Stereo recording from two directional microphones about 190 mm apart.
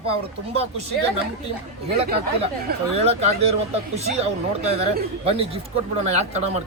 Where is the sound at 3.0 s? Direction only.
35° right (ahead or behind).